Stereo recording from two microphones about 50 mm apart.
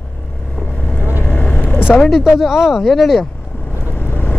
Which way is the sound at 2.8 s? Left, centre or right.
Centre.